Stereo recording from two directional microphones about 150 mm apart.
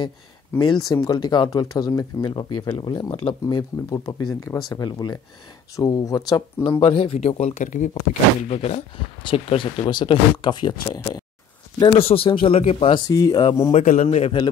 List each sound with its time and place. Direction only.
0.6 s speech: 30° left (ahead or behind)
6.8 s speech: 40° left (ahead or behind)
9.2 s speech: 35° left (ahead or behind)
11.8 s speech: 40° left (ahead or behind)
13.0 s speech: 25° left (ahead or behind)
14.0 s speech: 45° left (ahead or behind)